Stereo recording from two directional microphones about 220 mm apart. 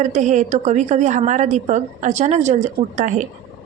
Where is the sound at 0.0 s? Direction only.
35° right (ahead or behind).